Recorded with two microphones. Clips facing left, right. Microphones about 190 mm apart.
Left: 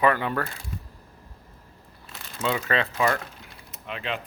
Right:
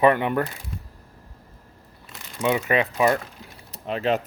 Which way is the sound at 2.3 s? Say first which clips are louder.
Right 4 dB; 15° right (ahead or behind).